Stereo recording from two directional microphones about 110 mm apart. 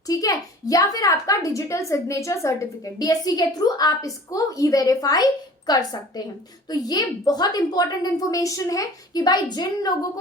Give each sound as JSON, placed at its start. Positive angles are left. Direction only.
{"t": 0.1, "sound": "speech", "side_deg": 30}